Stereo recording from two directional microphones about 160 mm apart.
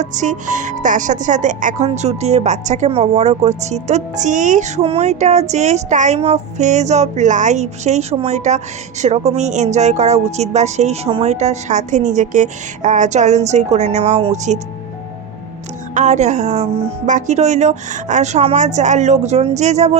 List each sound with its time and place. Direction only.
0.0 s speech: 50° right (ahead or behind)
16.0 s speech: 45° right (ahead or behind)